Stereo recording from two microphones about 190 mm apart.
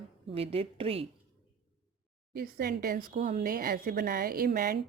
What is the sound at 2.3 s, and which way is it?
Speech, 55° right (ahead or behind).